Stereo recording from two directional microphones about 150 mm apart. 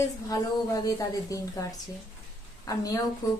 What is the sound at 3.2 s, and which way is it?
Speech, 25° left (ahead or behind).